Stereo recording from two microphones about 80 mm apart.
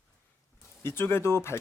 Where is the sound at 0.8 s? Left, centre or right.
Left.